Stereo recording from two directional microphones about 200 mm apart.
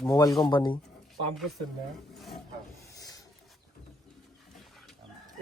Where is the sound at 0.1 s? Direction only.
20° left (ahead or behind).